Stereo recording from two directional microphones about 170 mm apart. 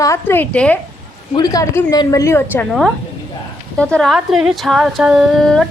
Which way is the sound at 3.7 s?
5° left (ahead or behind).